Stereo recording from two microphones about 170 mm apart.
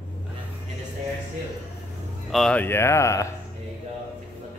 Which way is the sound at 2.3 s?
5° left (ahead or behind).